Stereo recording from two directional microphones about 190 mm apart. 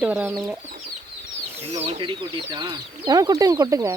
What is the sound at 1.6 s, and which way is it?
Speech, 35° right (ahead or behind).